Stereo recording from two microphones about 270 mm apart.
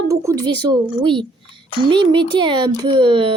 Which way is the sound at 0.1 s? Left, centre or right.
Centre.